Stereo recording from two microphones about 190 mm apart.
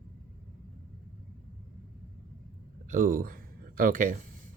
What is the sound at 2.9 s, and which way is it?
Speech, 45° right (ahead or behind).